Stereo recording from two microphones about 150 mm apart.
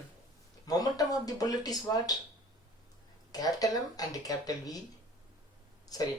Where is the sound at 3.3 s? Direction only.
25° left (ahead or behind).